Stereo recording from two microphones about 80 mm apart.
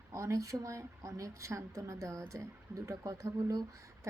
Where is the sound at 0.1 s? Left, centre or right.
Right.